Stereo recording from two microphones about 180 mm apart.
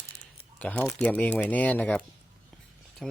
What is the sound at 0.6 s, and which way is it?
Speech, 10° left (ahead or behind).